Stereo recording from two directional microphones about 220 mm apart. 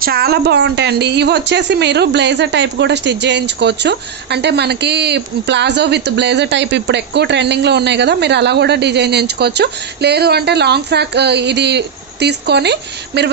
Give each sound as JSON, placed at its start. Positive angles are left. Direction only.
{"t": 0.0, "sound": "a woman's voice", "side_deg": -45}